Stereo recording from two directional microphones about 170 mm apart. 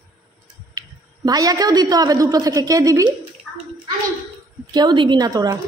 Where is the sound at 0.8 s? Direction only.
20° right (ahead or behind).